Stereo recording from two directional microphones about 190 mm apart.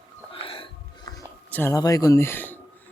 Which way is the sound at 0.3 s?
30° left (ahead or behind).